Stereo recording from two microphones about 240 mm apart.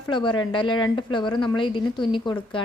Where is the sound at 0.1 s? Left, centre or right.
Centre.